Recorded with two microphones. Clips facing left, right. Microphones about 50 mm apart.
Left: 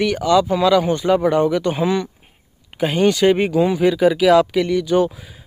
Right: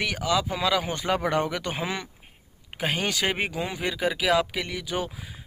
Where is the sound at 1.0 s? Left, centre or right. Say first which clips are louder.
Left 9 dB; right.